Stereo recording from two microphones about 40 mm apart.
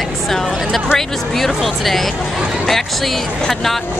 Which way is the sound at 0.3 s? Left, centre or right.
Centre.